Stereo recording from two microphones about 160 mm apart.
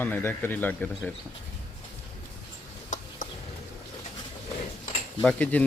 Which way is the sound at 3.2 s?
55° left (ahead or behind).